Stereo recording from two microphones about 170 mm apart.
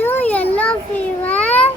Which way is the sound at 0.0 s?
10° left (ahead or behind).